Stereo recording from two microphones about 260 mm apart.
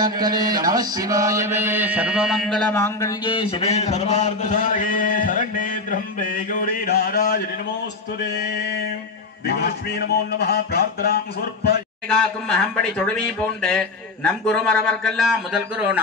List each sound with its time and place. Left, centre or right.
0.0 s mantra: centre; by 7.4 s left
9.5 s a man's voice: left
12.1 s speech: centre